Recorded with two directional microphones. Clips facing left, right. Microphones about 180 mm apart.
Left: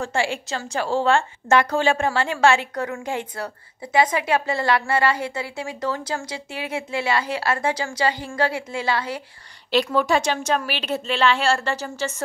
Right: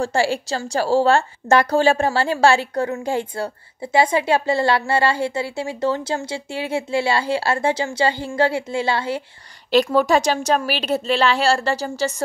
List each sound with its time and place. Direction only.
0.0 s a woman's voice: 35° right (ahead or behind)
9.8 s speech: 40° right (ahead or behind)